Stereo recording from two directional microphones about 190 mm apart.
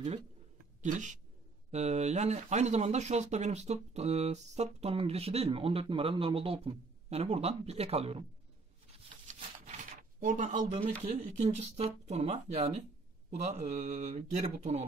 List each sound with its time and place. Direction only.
0.8 s speech: 40° right (ahead or behind)
10.2 s speech: 40° right (ahead or behind)
10.6 s speech: 25° right (ahead or behind)